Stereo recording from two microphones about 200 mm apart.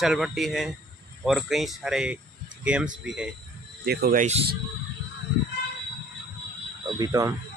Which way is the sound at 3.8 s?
50° right (ahead or behind).